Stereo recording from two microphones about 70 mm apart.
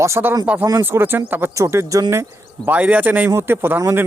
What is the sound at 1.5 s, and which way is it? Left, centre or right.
Speech, right.